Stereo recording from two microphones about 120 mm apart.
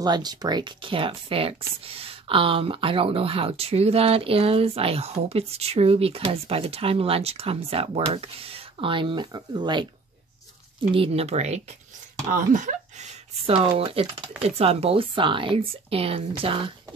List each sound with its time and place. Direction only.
0.0 s speech: 35° right (ahead or behind)
11.0 s speech: 60° right (ahead or behind)
12.4 s speech: 90° right
13.5 s speech: 50° right (ahead or behind)